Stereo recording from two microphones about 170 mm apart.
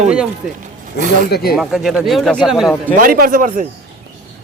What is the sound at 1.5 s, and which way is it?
Speech, centre (ahead or behind).